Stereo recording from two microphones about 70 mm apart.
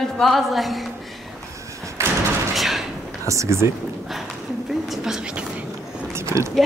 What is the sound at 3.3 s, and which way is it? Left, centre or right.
Speech, right.